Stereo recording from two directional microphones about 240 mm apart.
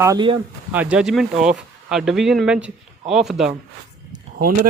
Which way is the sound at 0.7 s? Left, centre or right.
Centre.